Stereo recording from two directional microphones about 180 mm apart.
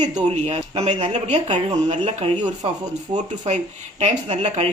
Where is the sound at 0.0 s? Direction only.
40° right (ahead or behind).